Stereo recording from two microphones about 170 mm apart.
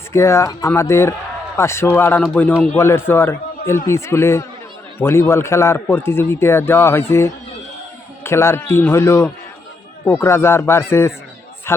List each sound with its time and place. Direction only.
0.1 s a man's voice: 15° left (ahead or behind)